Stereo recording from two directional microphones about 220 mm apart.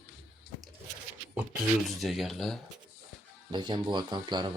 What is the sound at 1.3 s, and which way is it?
Speech, 5° right (ahead or behind).